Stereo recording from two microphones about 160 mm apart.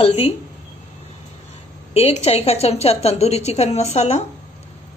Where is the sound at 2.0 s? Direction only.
40° left (ahead or behind).